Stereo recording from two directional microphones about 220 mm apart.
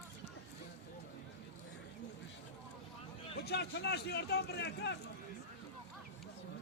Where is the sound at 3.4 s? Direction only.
50° left (ahead or behind).